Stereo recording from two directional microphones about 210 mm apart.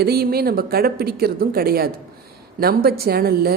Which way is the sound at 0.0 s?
45° right (ahead or behind).